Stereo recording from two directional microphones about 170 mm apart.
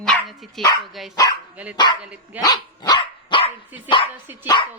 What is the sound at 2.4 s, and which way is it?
Dog, 25° left (ahead or behind).